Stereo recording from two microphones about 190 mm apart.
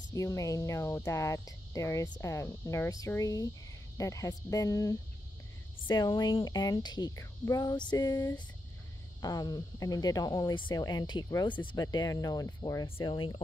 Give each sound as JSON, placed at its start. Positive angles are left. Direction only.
{"t": 0.1, "sound": "speech", "side_deg": 15}